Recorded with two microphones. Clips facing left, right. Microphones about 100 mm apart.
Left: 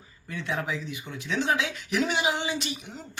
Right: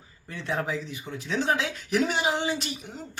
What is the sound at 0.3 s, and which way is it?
A woman's voice, 35° right (ahead or behind).